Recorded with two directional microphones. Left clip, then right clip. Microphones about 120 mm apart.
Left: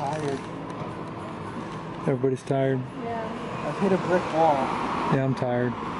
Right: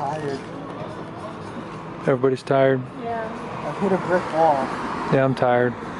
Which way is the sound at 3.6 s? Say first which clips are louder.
Right 2 dB; centre (ahead or behind).